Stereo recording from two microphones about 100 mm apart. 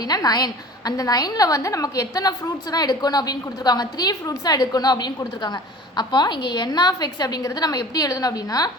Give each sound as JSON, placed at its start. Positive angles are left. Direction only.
{"t": 0.0, "sound": "a woman's voice", "side_deg": 40}